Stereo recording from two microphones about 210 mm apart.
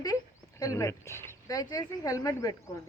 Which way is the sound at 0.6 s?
15° left (ahead or behind).